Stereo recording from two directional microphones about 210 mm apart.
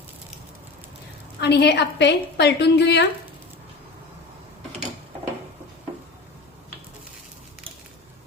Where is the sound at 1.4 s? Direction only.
50° left (ahead or behind).